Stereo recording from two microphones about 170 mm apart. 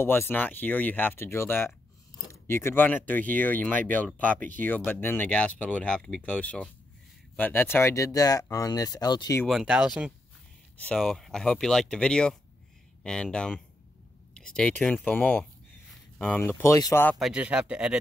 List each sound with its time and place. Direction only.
0.0 s speech: 15° left (ahead or behind)
9.5 s speech: 5° right (ahead or behind); by 17.2 s 10° left (ahead or behind)
17.2 s speech: 5° right (ahead or behind)